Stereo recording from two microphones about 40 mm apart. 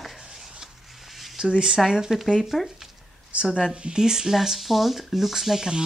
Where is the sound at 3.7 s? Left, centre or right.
Right.